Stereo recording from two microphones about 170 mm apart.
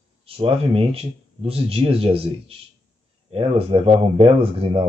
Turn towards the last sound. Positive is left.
turn(degrees=-35)  # may be behind; listen again after turning